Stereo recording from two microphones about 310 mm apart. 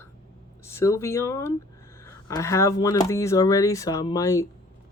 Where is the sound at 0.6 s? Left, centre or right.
Centre.